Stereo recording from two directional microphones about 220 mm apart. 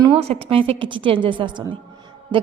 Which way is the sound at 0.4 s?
25° right (ahead or behind).